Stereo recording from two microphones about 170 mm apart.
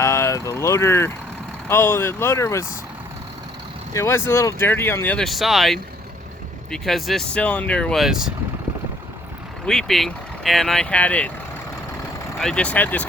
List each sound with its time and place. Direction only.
0.0 s speech: 15° left (ahead or behind)
3.9 s speech: 15° left (ahead or behind); by 8.3 s 5° right (ahead or behind)
9.6 s speech: centre (ahead or behind)
12.4 s speech: 5° left (ahead or behind)